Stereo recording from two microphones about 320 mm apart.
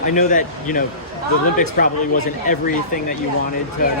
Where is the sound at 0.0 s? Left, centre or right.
Left.